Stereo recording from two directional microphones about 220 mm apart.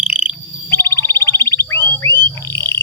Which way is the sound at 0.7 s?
10° left (ahead or behind).